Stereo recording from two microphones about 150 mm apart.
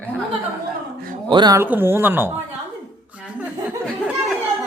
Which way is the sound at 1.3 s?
30° right (ahead or behind).